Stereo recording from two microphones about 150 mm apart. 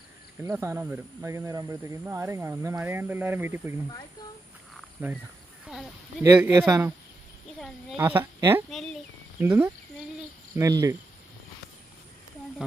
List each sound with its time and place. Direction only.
0.5 s speech: 15° right (ahead or behind)
5.0 s speech: 15° right (ahead or behind)
5.6 s a sound: centre (ahead or behind)
6.2 s speech: 15° right (ahead or behind)
7.9 s speech: 15° right (ahead or behind)
8.7 s speech: 5° left (ahead or behind)
9.4 s speech: 15° right (ahead or behind)
10.5 s cricket: 20° right (ahead or behind)